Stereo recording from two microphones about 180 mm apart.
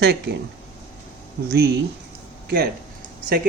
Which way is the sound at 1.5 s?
65° right (ahead or behind).